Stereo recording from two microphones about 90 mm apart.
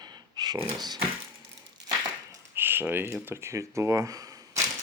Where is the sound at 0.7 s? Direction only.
50° right (ahead or behind).